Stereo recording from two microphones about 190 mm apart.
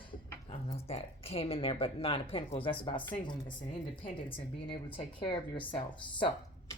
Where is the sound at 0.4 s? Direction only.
30° left (ahead or behind).